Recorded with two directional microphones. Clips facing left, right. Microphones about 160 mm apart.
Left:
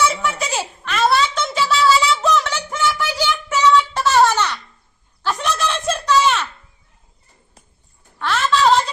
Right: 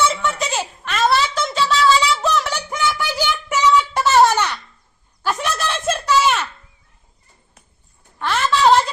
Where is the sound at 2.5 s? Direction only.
15° right (ahead or behind).